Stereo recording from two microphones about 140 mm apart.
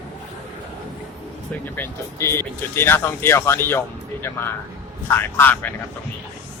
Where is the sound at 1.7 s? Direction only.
15° left (ahead or behind).